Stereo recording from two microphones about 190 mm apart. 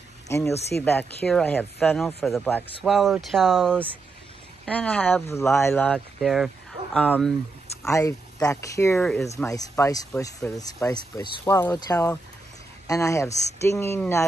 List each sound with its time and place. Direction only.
0.3 s speech: 10° left (ahead or behind)
7.9 s speech: 15° left (ahead or behind)